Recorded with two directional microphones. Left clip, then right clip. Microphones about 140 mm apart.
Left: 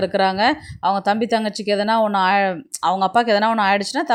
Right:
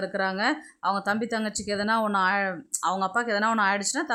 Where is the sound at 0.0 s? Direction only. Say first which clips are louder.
Left 9 dB; 30° left (ahead or behind).